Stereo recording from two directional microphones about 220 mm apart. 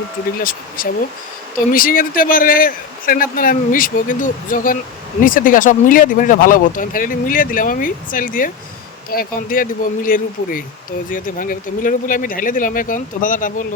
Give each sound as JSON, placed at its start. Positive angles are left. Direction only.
{"t": 0.3, "sound": "speech", "side_deg": 40}